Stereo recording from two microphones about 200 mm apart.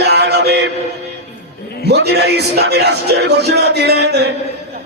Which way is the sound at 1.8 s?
55° right (ahead or behind).